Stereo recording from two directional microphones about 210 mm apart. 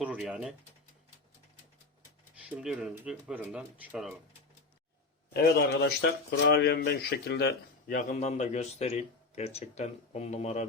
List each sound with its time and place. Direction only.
0.0 s speech: 5° right (ahead or behind)
2.6 s speech: 5° right (ahead or behind)
5.3 s speech: 50° left (ahead or behind)
7.9 s speech: 30° left (ahead or behind)